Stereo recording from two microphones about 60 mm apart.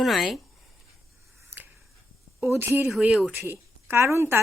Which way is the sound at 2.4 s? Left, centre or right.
Right.